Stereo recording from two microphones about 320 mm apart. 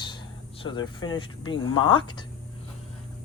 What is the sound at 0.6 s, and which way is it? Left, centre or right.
Speech, centre.